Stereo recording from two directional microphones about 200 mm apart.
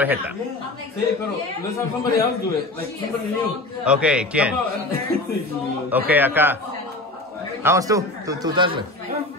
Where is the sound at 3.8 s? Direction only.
5° right (ahead or behind).